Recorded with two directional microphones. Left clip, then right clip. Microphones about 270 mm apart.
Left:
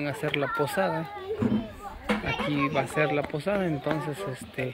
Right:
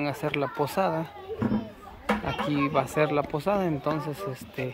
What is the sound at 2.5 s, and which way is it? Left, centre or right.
Speech, centre.